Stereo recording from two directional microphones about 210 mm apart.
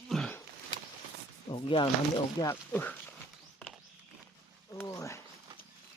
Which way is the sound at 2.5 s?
10° left (ahead or behind).